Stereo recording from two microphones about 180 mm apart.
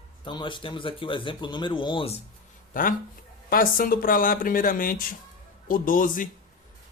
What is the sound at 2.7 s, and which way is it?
Speech, 50° left (ahead or behind).